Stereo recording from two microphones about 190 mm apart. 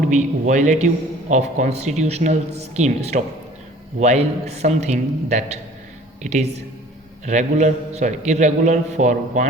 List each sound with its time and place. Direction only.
0.1 s a man's voice: 40° right (ahead or behind)